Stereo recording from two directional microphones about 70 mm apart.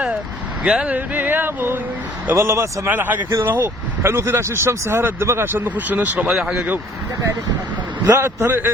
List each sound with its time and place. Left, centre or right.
0.6 s speech: centre; by 2.9 s right
2.9 s speech: right
6.2 s speech: centre
8.1 s speech: right